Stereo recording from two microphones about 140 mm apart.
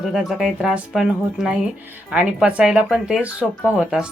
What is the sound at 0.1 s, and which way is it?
A woman's voice, centre (ahead or behind).